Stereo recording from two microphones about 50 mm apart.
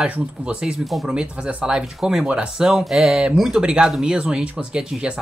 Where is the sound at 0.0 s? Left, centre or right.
Centre.